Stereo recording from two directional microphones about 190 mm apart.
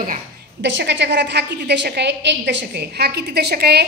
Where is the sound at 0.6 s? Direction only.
70° right (ahead or behind).